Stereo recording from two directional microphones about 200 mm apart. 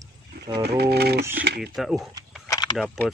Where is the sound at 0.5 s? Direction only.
55° right (ahead or behind).